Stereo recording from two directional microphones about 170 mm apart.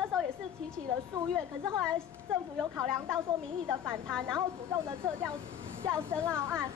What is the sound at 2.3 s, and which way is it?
Speech, 15° right (ahead or behind).